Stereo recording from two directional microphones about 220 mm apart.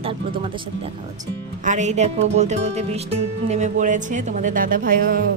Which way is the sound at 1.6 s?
35° right (ahead or behind).